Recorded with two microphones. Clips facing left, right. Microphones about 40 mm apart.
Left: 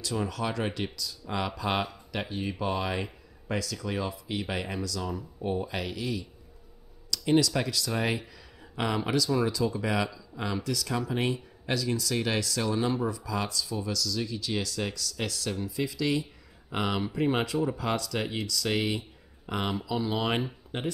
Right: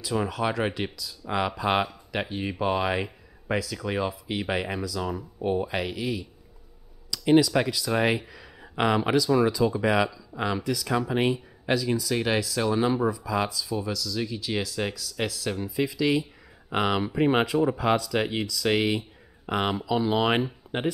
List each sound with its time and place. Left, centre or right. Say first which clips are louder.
0.0 s speech: right 4 dB; centre